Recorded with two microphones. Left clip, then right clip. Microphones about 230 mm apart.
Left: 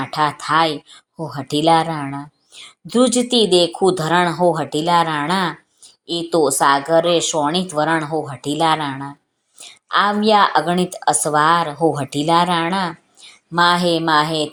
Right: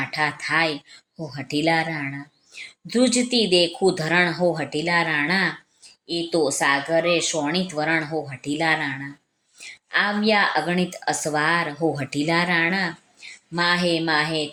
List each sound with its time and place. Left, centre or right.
0.0 s speech: centre